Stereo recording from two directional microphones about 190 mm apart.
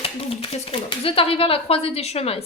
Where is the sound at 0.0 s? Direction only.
30° left (ahead or behind).